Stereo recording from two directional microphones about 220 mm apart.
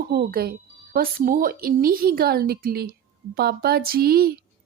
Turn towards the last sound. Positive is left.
turn(degrees=-45)  # may be behind; listen again after turning